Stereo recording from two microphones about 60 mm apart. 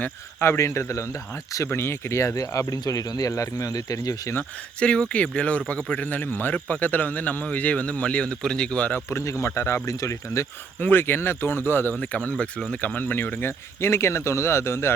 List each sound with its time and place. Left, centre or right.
0.3 s speech: left
4.8 s speech: centre
9.0 s speech: left
10.8 s speech: left
11.9 s speech: left
13.0 s speech: left
13.4 s speech: left